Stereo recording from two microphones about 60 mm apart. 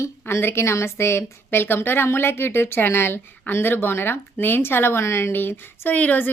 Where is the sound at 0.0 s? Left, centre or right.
Left.